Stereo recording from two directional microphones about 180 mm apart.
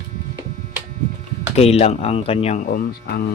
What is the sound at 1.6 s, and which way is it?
Speech, 35° left (ahead or behind).